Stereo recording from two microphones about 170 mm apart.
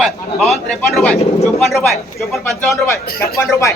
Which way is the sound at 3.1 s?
60° left (ahead or behind).